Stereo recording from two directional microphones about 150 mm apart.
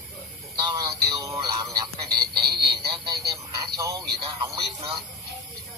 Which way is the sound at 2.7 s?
25° right (ahead or behind).